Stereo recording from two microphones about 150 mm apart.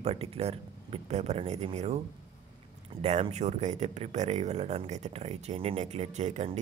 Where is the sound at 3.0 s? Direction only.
45° right (ahead or behind).